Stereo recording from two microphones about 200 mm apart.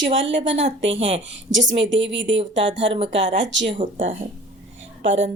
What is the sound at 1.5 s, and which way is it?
Speech, 65° right (ahead or behind).